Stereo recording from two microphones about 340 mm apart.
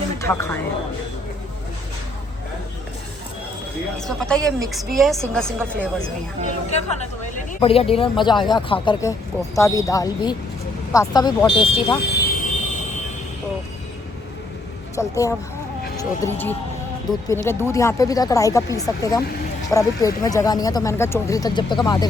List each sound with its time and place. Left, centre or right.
0.2 s speech: centre
3.9 s a woman's voice: centre
6.7 s speech: centre
12.0 s a sound: left
14.9 s speech: centre